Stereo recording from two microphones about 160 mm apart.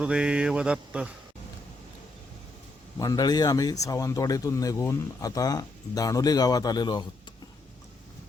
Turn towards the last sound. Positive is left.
turn(degrees=25)  # may be behind; listen again after turning